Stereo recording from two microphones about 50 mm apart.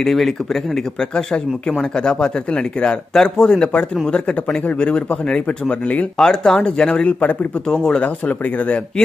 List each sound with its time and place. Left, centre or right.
0.0 s speech: centre
1.8 s speech: centre
6.1 s speech: centre
7.7 s speech: centre
8.0 s speech: left